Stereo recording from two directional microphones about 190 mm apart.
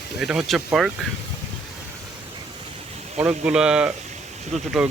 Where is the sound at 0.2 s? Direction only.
5° right (ahead or behind).